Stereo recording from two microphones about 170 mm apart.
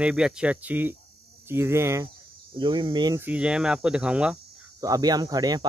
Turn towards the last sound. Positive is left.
turn(degrees=-20)  # may be behind; listen again after turning